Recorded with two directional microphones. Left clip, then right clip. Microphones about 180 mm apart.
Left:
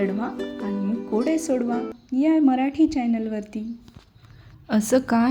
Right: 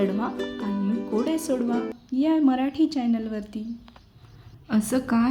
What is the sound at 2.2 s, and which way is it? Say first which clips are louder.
A woman's voice: left 3 dB; 15° left (ahead or behind).